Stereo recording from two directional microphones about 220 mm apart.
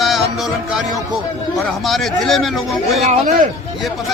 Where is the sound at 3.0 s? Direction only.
30° right (ahead or behind).